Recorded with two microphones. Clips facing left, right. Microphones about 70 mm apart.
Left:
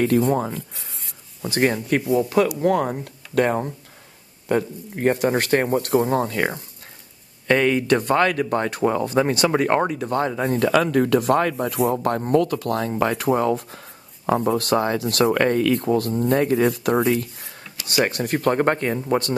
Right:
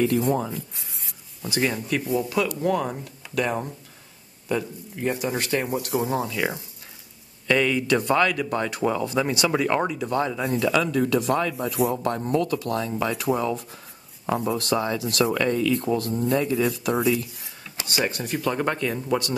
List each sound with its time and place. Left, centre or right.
0.2 s speech: left
1.5 s speech: left
2.0 s speech: left
2.6 s speech: left
15.9 s speech: left